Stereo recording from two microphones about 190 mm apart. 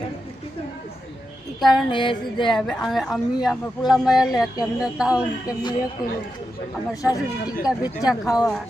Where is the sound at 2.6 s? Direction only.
Centre (ahead or behind).